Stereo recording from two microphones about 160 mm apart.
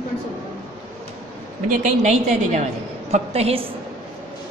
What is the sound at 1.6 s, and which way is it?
A woman's voice, 45° right (ahead or behind).